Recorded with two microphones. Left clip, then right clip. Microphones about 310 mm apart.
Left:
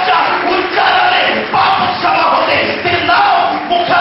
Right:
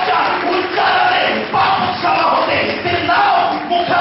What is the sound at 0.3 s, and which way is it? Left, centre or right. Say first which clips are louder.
Battle cry: left 3 dB; centre.